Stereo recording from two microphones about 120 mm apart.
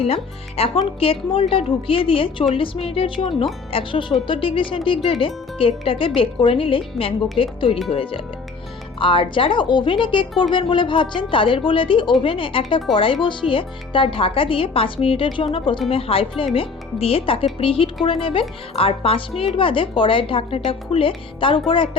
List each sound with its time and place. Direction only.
0.0 s speech: 55° left (ahead or behind)